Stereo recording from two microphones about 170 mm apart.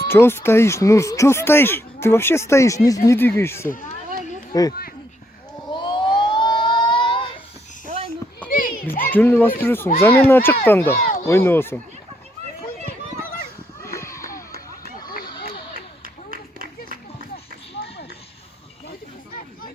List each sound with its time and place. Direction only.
0.1 s speech: 15° left (ahead or behind)
5.7 s a sound: 30° left (ahead or behind)
8.4 s children playing: 55° left (ahead or behind)
9.1 s speech: 10° left (ahead or behind)
13.8 s a sound: 15° left (ahead or behind)
16.0 s run: 55° right (ahead or behind)